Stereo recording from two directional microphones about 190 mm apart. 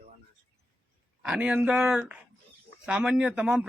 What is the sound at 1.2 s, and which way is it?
A man's voice, 5° right (ahead or behind).